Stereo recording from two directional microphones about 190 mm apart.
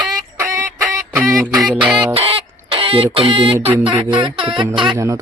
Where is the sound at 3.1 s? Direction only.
30° right (ahead or behind).